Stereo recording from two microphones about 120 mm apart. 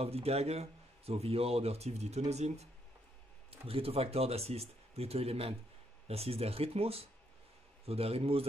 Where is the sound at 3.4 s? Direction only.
55° right (ahead or behind).